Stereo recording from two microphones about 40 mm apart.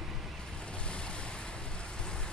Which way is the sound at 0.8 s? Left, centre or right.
Left.